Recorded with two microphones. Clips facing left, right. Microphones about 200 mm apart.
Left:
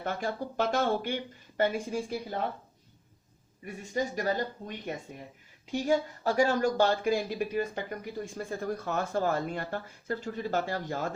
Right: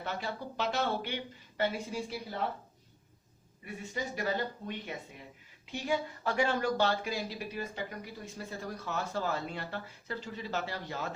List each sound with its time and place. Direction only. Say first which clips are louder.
0.0 s speech: left 5 dB; 50° left (ahead or behind)
3.9 s speech: left 5 dB; 40° left (ahead or behind)